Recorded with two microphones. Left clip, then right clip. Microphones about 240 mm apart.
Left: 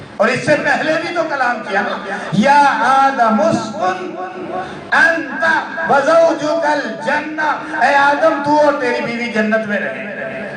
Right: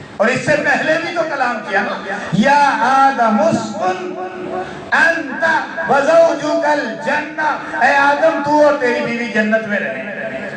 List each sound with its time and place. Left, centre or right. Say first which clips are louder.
0.2 s a man's voice: left 1 dB; left